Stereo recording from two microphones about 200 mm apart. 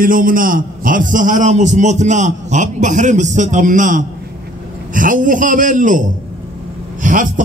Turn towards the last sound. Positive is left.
turn(degrees=-40)  # may be behind; listen again after turning